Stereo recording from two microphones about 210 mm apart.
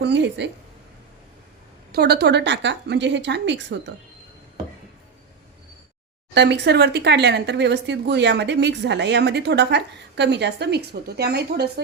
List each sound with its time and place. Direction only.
0.0 s a sound: 55° right (ahead or behind)
1.9 s speech: 50° right (ahead or behind)
6.3 s speech: 55° right (ahead or behind)